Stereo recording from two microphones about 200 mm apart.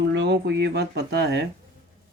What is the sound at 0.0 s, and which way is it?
Speech, 60° right (ahead or behind).